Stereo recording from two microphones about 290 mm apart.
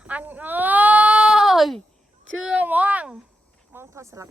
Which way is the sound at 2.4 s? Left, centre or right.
Centre.